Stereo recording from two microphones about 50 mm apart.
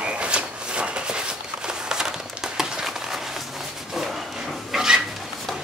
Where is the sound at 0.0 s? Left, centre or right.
Right.